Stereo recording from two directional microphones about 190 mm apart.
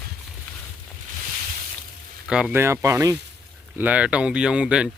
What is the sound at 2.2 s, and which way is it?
Speech, 5° right (ahead or behind).